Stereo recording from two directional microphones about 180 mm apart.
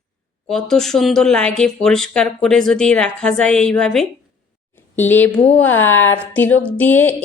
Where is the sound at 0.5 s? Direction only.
Centre (ahead or behind).